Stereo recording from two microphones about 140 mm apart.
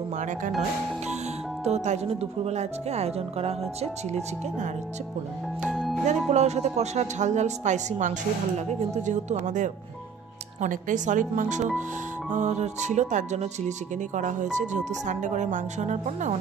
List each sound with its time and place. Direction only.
0.2 s a man's voice: 65° right (ahead or behind)
1.6 s speech: 50° right (ahead or behind)
5.7 s music: centre (ahead or behind)
6.0 s a man's voice: 55° right (ahead or behind)